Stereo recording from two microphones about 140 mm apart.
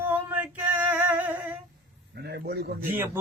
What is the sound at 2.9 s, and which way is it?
Speech, 15° right (ahead or behind).